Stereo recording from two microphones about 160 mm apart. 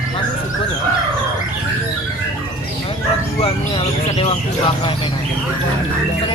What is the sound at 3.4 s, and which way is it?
Speech, 40° left (ahead or behind).